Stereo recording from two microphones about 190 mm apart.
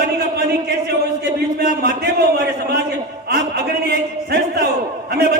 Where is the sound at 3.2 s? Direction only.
55° right (ahead or behind).